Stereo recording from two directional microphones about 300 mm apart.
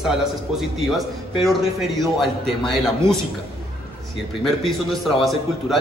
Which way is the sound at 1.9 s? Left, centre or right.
Centre.